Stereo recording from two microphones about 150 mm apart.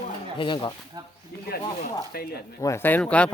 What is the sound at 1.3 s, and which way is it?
Speech, 90° left.